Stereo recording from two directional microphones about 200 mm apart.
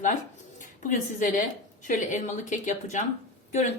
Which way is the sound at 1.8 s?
40° left (ahead or behind).